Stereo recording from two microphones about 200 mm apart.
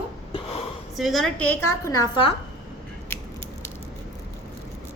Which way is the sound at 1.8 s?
15° left (ahead or behind).